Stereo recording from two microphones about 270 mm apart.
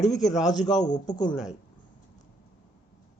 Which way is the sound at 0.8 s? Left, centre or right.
Left.